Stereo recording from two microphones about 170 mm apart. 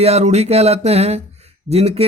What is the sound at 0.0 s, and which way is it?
Speech, 40° right (ahead or behind).